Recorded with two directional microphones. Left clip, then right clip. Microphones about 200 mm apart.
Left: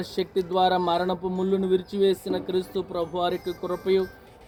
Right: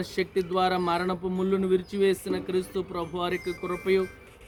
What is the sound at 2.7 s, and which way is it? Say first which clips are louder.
Speech: left 3 dB; 55° right (ahead or behind).